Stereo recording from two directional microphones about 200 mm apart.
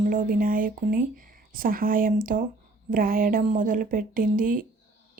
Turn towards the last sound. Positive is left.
turn(degrees=-45)  # may be behind; listen again after turning